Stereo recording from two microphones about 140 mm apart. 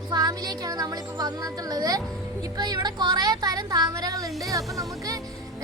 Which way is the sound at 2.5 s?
30° right (ahead or behind).